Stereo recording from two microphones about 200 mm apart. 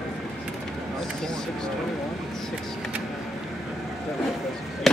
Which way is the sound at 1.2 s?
5° left (ahead or behind).